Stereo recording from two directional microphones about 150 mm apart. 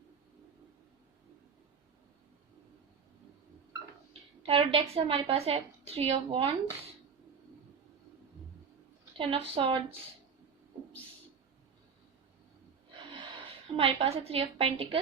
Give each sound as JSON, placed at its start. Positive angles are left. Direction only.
{"t": 4.1, "sound": "a woman's voice", "side_deg": -40}
{"t": 9.1, "sound": "a woman's voice", "side_deg": -35}
{"t": 13.1, "sound": "a woman's voice", "side_deg": -35}